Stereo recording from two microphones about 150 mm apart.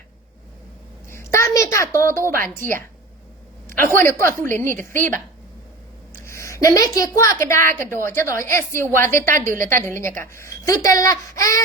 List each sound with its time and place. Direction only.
1.1 s a sound: 20° left (ahead or behind)
3.9 s a woman's voice: 15° left (ahead or behind)
6.2 s a woman's voice: 20° left (ahead or behind)